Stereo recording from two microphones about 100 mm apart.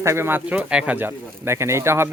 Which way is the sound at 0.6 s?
10° right (ahead or behind).